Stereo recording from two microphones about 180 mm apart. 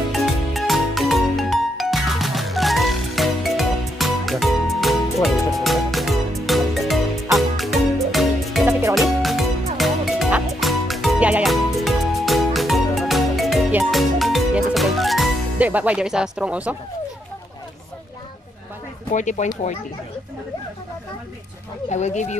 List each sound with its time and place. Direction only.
0.1 s music: centre (ahead or behind)
19.1 s speech: 40° left (ahead or behind)
21.8 s speech: 40° left (ahead or behind)